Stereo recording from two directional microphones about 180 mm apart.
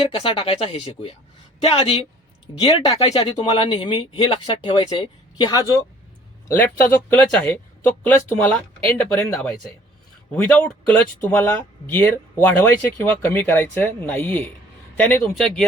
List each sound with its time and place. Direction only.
0.1 s speech: 30° left (ahead or behind)
6.9 s speech: 10° left (ahead or behind)
10.3 s speech: 10° left (ahead or behind)